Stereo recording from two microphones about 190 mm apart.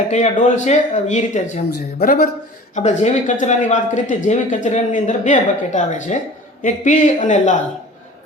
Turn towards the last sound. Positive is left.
turn(degrees=40)  # may be behind; listen again after turning